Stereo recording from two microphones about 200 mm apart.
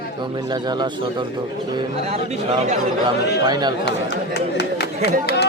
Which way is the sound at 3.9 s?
60° left (ahead or behind).